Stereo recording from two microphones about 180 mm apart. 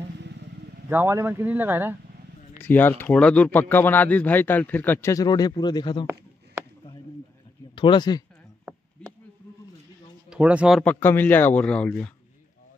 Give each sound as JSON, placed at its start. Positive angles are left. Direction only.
{"t": 0.8, "sound": "speech", "side_deg": -10}
{"t": 2.6, "sound": "speech", "side_deg": 10}
{"t": 7.7, "sound": "speech", "side_deg": 25}
{"t": 10.3, "sound": "speech", "side_deg": -5}
{"t": 10.8, "sound": "speech", "side_deg": 10}